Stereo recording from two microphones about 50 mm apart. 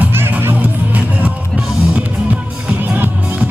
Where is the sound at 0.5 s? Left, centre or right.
Right.